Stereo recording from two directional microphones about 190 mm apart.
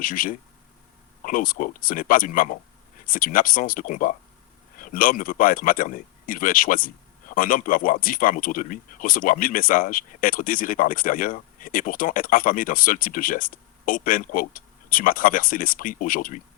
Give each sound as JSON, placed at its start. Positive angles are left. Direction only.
{"t": 0.0, "sound": "speech", "side_deg": 45}